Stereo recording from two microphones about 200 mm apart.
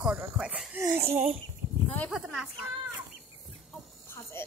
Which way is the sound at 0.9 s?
30° right (ahead or behind).